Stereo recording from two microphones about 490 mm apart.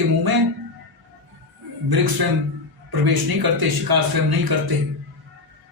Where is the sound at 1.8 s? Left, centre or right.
Right.